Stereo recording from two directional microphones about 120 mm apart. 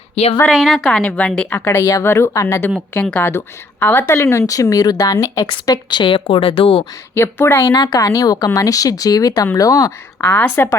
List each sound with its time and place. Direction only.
0.5 s a woman's voice: 5° right (ahead or behind); by 2.7 s 20° left (ahead or behind)
2.9 s a woman's voice: 10° left (ahead or behind); by 6.8 s 50° left (ahead or behind)
7.1 s a woman's voice: 20° left (ahead or behind)
10.2 s a woman's voice: 15° left (ahead or behind)